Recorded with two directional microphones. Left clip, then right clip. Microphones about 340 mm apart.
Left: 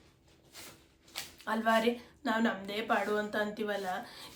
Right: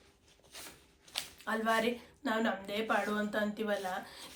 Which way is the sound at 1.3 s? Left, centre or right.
Centre.